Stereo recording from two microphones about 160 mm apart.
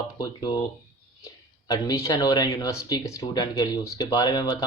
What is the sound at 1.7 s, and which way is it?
Speech, 25° left (ahead or behind).